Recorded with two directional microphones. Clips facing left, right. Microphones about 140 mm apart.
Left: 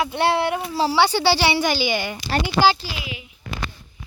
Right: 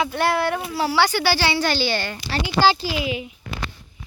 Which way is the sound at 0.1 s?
25° left (ahead or behind).